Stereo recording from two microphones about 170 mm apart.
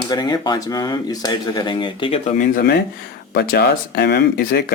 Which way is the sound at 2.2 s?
50° left (ahead or behind).